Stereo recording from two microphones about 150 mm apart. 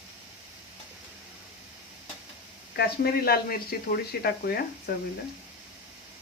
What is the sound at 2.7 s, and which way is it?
Speech, 90° left.